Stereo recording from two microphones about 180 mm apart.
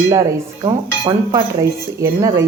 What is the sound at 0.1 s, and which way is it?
Speech, 20° right (ahead or behind).